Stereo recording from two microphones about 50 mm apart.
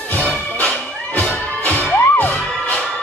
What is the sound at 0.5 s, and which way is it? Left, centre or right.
Music, left.